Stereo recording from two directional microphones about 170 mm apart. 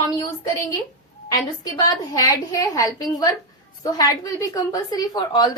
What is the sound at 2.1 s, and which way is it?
A woman's voice, 20° left (ahead or behind).